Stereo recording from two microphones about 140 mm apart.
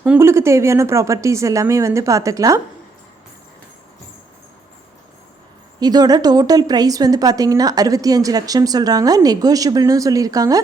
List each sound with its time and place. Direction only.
0.2 s speech: 20° right (ahead or behind)
5.8 s speech: 30° right (ahead or behind)